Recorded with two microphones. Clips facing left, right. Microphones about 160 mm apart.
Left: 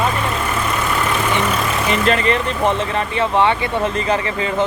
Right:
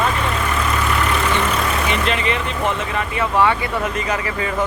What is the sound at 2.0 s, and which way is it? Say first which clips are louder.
Speech: left 4 dB; 40° left (ahead or behind).